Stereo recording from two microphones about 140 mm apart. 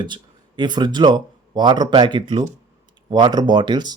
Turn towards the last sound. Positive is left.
turn(degrees=-30)  # may be behind; listen again after turning